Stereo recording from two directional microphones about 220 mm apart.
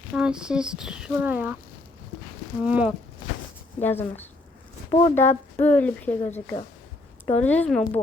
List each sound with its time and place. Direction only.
0.1 s speech: 5° right (ahead or behind)
2.6 s speech: 5° right (ahead or behind)
3.8 s speech: 10° left (ahead or behind)
4.9 s speech: 25° left (ahead or behind)
5.5 s speech: 5° left (ahead or behind)